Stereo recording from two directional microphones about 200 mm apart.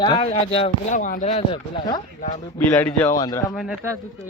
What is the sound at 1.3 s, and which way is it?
Speech, 25° left (ahead or behind).